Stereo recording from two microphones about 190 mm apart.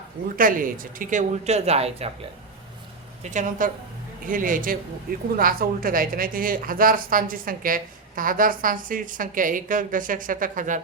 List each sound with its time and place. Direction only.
0.3 s speech: 45° right (ahead or behind)
3.2 s a woman's voice: 40° right (ahead or behind)